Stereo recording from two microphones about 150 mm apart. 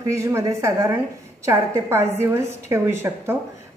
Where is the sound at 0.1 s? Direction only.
20° right (ahead or behind).